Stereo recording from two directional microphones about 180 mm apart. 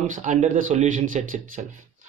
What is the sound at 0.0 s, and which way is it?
Speech, 45° right (ahead or behind).